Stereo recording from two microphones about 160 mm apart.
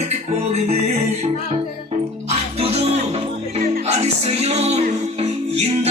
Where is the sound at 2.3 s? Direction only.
40° right (ahead or behind).